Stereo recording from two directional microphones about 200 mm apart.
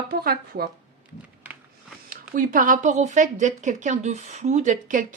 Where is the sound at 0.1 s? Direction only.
50° right (ahead or behind).